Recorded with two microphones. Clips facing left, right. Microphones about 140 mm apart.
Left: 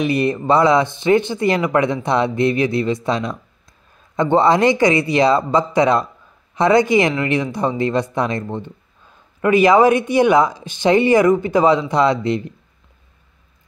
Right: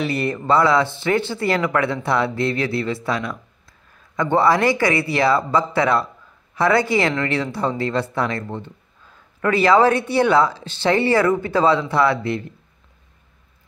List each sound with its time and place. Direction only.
0.0 s speech: 15° left (ahead or behind)